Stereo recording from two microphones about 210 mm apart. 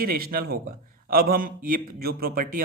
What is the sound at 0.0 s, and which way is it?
A man's voice, 45° right (ahead or behind).